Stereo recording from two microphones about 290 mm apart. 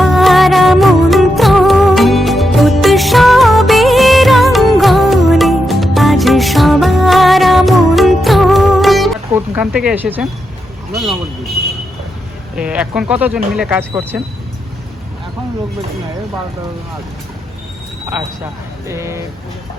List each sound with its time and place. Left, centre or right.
0.0 s music: centre
12.5 s speech: centre
18.9 s speech: centre